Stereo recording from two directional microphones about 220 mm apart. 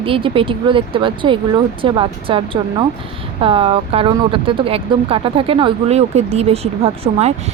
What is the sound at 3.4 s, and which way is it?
Speech, 25° right (ahead or behind).